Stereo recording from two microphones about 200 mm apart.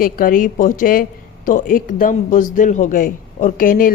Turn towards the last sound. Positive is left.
turn(degrees=45)  # may be behind; listen again after turning